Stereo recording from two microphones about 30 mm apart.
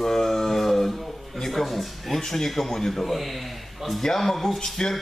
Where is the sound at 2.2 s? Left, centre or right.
Centre.